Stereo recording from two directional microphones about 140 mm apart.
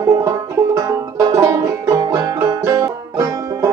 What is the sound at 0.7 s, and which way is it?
Banjo, 25° right (ahead or behind).